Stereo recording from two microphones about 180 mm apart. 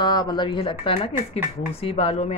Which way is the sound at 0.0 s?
25° left (ahead or behind).